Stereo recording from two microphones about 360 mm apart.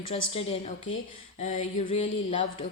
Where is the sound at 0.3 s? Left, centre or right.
Centre.